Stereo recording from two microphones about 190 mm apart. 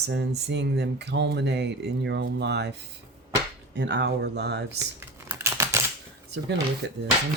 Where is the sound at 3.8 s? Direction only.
65° right (ahead or behind).